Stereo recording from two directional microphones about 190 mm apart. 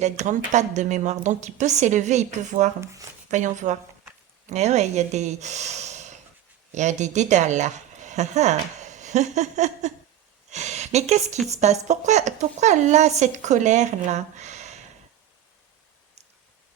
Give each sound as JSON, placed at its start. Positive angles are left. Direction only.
{"t": 0.0, "sound": "a woman's voice", "side_deg": -40}
{"t": 2.8, "sound": "speech", "side_deg": -15}
{"t": 3.2, "sound": "a woman's voice", "side_deg": -40}